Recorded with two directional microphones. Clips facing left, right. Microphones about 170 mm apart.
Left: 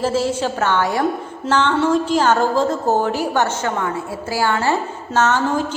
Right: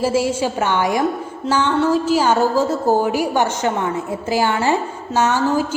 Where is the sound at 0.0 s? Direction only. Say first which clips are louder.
Right 1 dB; 10° right (ahead or behind).